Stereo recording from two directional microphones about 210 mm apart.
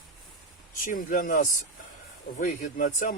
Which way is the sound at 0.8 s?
40° left (ahead or behind).